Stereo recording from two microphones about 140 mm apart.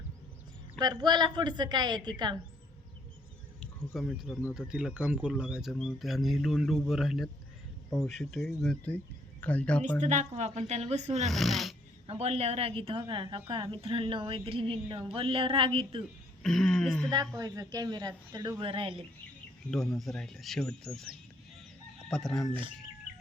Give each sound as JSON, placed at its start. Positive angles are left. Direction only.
{"t": 0.8, "sound": "speech", "side_deg": -30}
{"t": 3.9, "sound": "speech", "side_deg": 0}
{"t": 10.0, "sound": "a woman's voice", "side_deg": -60}
{"t": 11.3, "sound": "speech", "side_deg": 0}
{"t": 12.0, "sound": "a woman's voice", "side_deg": -50}
{"t": 16.4, "sound": "speech", "side_deg": 5}
{"t": 17.3, "sound": "speech", "side_deg": -20}
{"t": 19.7, "sound": "speech", "side_deg": 5}
{"t": 22.1, "sound": "speech", "side_deg": 5}